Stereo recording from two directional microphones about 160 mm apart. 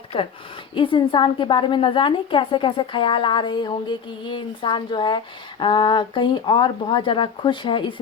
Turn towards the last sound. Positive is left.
turn(degrees=30)  # may be behind; listen again after turning